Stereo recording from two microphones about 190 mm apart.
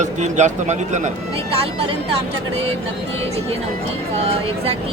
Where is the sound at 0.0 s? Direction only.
40° right (ahead or behind).